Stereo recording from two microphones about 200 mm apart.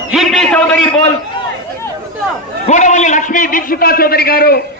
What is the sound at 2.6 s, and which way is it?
A man's voice, 35° left (ahead or behind).